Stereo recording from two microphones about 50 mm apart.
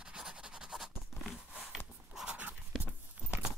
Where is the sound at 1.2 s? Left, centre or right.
Centre.